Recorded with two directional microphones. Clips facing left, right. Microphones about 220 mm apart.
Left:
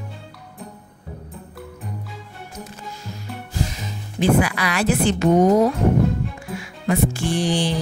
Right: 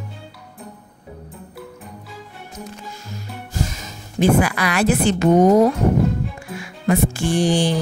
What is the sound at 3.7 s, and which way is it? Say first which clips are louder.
Music: left 2 dB; 45° right (ahead or behind).